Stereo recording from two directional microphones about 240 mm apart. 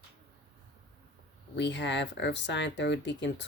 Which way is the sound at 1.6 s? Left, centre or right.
Left.